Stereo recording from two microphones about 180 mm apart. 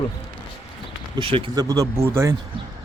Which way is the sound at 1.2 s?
30° right (ahead or behind).